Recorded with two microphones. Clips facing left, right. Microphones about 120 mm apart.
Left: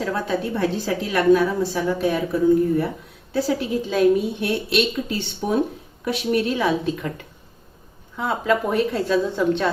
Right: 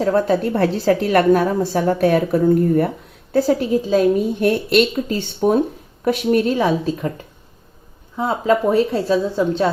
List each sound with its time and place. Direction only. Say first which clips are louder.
0.0 s a woman's voice: right 8 dB; 40° right (ahead or behind)
0.4 s a woman's voice: right 6 dB; 65° right (ahead or behind)
3.3 s a woman's voice: right 6 dB; 40° right (ahead or behind)
8.1 s a woman's voice: right 4 dB; 30° right (ahead or behind)